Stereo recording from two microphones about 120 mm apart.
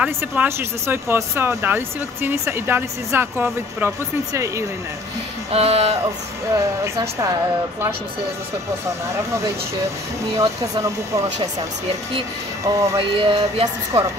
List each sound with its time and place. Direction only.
0.0 s speech: 15° right (ahead or behind)
5.5 s a sound: 60° right (ahead or behind)
6.5 s speech: 25° right (ahead or behind)
8.8 s speech: 25° right (ahead or behind)
12.7 s speech: 25° right (ahead or behind)
13.1 s a sound: 55° right (ahead or behind)